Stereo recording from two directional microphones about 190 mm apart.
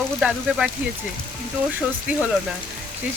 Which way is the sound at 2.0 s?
5° right (ahead or behind).